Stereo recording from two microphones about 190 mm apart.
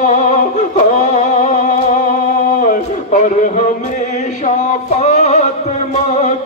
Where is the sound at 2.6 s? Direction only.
45° left (ahead or behind).